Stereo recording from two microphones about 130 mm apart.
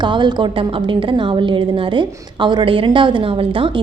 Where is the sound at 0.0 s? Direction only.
35° right (ahead or behind).